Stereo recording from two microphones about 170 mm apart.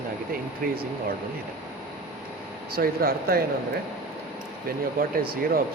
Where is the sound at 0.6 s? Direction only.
55° right (ahead or behind).